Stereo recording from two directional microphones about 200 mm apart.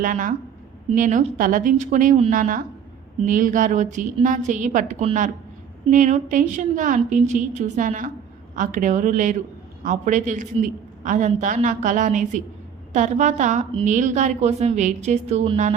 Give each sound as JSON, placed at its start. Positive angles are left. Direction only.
{"t": 0.0, "sound": "a woman's voice", "side_deg": -40}